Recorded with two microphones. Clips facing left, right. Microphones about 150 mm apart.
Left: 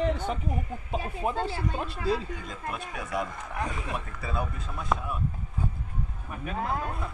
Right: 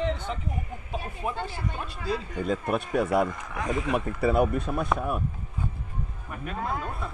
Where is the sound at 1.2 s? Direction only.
30° left (ahead or behind).